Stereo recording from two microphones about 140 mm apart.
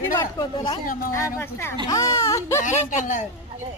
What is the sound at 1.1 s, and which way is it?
Speech, 20° left (ahead or behind).